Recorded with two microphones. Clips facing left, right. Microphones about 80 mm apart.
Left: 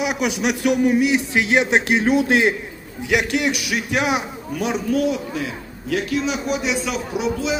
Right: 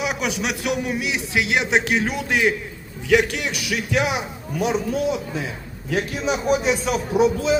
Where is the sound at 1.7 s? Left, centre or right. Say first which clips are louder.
Left 4 dB; left.